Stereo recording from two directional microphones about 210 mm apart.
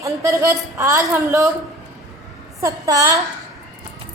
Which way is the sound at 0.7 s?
15° right (ahead or behind).